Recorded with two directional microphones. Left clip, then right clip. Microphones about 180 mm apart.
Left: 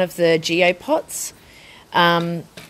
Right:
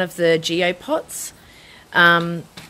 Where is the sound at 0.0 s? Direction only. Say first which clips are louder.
Left 1 dB; 15° left (ahead or behind).